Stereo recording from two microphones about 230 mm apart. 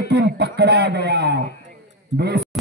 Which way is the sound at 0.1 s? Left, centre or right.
Right.